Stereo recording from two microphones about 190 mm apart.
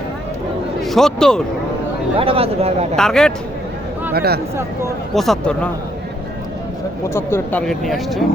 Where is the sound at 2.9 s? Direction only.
5° left (ahead or behind).